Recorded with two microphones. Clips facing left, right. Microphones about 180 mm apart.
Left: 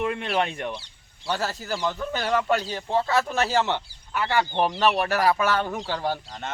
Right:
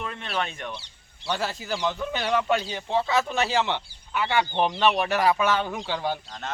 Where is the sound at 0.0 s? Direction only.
15° left (ahead or behind).